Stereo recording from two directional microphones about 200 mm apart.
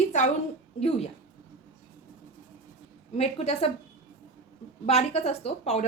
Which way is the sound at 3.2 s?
30° left (ahead or behind).